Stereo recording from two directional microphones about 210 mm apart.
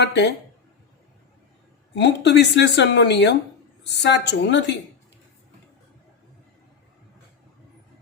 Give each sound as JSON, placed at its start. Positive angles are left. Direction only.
{"t": 0.0, "sound": "speech", "side_deg": 55}
{"t": 2.0, "sound": "a woman's voice", "side_deg": 55}